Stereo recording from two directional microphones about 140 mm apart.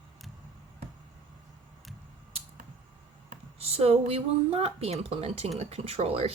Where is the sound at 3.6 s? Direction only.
45° right (ahead or behind).